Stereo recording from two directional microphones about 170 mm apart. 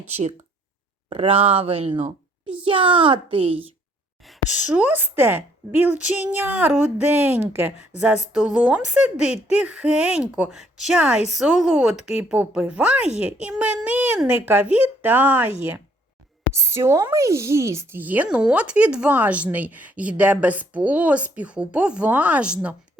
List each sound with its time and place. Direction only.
0.1 s speech: 40° right (ahead or behind)
4.3 s speech: 10° right (ahead or behind)
16.6 s speech: 15° right (ahead or behind)